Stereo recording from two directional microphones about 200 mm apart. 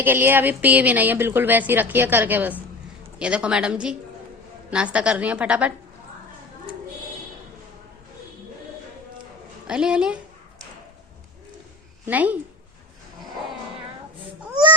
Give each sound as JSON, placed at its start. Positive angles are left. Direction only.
{"t": 0.0, "sound": "a woman's voice", "side_deg": -10}
{"t": 9.6, "sound": "a woman's voice", "side_deg": -5}
{"t": 12.0, "sound": "a woman's voice", "side_deg": -10}